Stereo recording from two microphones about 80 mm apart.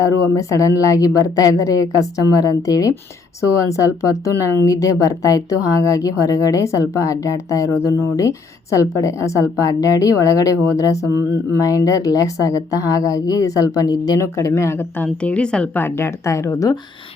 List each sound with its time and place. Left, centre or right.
0.0 s a woman's voice: left
14.2 s a woman's voice: left
15.0 s speech: centre
15.7 s a woman's voice: left